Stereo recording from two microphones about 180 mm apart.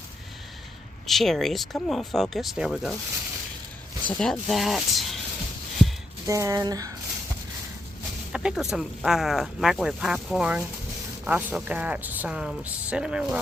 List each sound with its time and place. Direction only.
1.0 s speech: centre (ahead or behind)
4.0 s speech: 5° left (ahead or behind)
6.2 s speech: 15° right (ahead or behind)
8.3 s a sound: 5° right (ahead or behind)
8.7 s speech: 5° right (ahead or behind)